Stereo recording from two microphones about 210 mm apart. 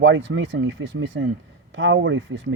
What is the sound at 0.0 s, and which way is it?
Speech, 65° right (ahead or behind).